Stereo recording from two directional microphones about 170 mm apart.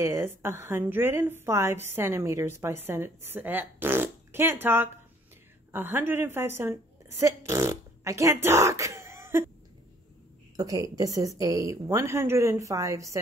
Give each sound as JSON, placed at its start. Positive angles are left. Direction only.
{"t": 0.0, "sound": "a woman's voice", "side_deg": -15}
{"t": 10.5, "sound": "speech", "side_deg": -20}